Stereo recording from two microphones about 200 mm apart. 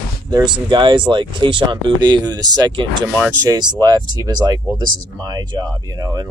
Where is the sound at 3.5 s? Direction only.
20° right (ahead or behind).